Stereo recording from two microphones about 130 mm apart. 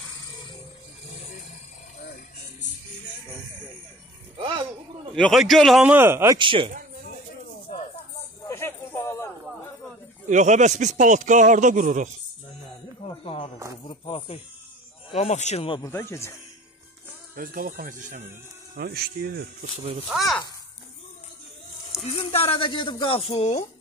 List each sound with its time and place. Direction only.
5.1 s a man's voice: centre (ahead or behind)
5.9 s speech: 15° right (ahead or behind)
6.3 s speech: 40° right (ahead or behind)
8.5 s a sound: 20° left (ahead or behind)
10.2 s speech: 70° right (ahead or behind)
13.0 s a sound: 45° left (ahead or behind)
13.8 s speech: 40° left (ahead or behind)
15.0 s speech: 55° left (ahead or behind)
15.8 s speech: 20° left (ahead or behind)
17.4 s speech: 90° right; by 18.3 s 70° right (ahead or behind)
19.8 s a child's voice: 45° right (ahead or behind)
20.1 s a man's voice: centre (ahead or behind)
22.0 s speech: 50° left (ahead or behind)